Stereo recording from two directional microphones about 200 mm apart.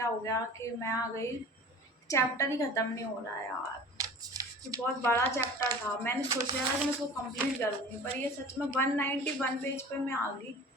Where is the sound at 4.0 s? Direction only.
15° right (ahead or behind).